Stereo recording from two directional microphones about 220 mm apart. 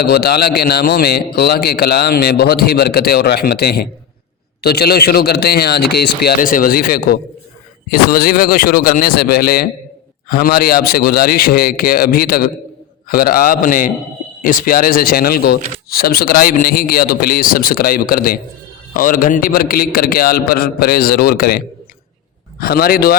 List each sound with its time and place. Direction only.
0.0 s a man's voice: 45° left (ahead or behind)